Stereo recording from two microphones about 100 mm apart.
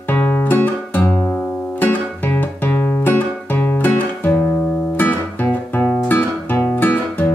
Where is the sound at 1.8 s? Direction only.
20° left (ahead or behind).